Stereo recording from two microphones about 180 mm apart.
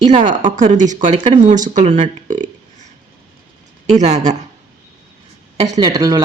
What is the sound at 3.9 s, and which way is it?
Speech, 40° right (ahead or behind).